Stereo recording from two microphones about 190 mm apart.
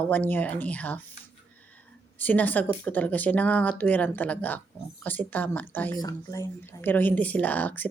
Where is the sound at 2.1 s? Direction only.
10° left (ahead or behind).